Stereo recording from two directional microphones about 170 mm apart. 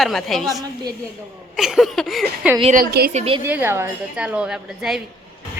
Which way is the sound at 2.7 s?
65° right (ahead or behind).